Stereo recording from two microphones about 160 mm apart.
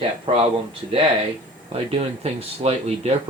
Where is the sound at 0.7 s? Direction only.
35° right (ahead or behind).